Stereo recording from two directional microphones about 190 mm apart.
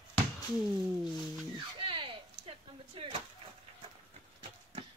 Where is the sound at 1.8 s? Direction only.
25° right (ahead or behind).